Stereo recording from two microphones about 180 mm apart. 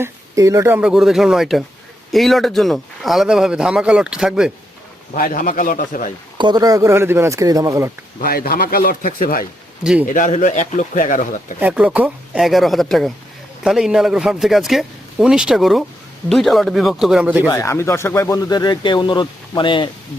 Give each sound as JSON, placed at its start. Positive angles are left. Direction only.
{"t": 0.0, "sound": "speech", "side_deg": -15}
{"t": 5.1, "sound": "speech", "side_deg": 50}
{"t": 6.3, "sound": "speech", "side_deg": -25}
{"t": 8.2, "sound": "speech", "side_deg": 55}
{"t": 9.8, "sound": "speech", "side_deg": -5}
{"t": 10.1, "sound": "speech", "side_deg": 45}
{"t": 11.6, "sound": "speech", "side_deg": -5}
{"t": 17.4, "sound": "speech", "side_deg": 15}